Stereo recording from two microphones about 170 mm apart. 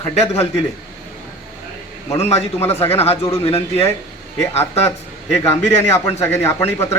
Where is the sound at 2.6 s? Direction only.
15° left (ahead or behind).